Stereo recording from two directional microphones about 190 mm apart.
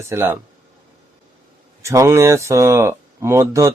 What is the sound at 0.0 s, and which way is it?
Speech, 15° right (ahead or behind).